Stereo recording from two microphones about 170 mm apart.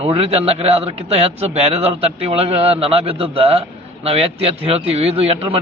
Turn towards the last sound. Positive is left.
turn(degrees=-35)  # may be behind; listen again after turning